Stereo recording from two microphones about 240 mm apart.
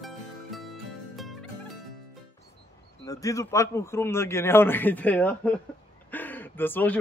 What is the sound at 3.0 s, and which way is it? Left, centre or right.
A man's voice, centre.